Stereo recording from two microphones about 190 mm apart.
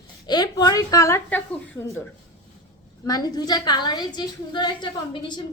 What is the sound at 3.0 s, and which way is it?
A woman's voice, 20° left (ahead or behind).